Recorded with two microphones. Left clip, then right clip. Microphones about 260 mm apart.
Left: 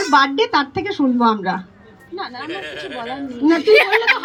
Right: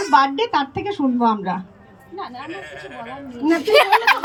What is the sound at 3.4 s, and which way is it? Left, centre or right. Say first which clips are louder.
Speech: left 3 dB; centre.